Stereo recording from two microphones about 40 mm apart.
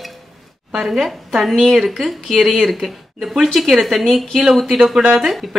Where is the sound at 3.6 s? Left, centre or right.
Centre.